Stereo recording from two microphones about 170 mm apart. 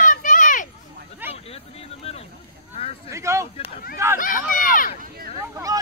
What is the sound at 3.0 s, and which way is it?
Speech, 15° right (ahead or behind).